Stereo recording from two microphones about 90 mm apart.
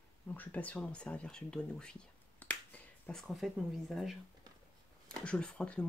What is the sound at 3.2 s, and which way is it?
Speech, centre (ahead or behind).